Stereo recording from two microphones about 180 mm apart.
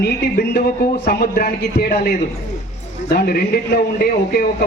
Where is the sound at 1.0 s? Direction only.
60° left (ahead or behind).